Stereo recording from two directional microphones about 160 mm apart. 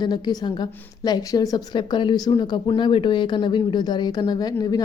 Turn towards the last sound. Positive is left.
turn(degrees=25)  # may be behind; listen again after turning